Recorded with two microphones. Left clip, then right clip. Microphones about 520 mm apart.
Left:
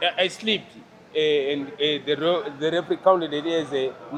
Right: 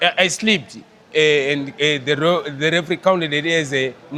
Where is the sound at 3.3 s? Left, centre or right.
Right.